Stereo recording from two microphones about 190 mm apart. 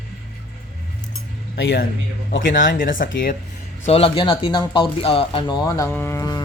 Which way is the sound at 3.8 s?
30° left (ahead or behind).